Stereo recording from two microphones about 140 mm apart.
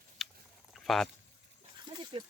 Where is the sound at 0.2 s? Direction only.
Centre (ahead or behind).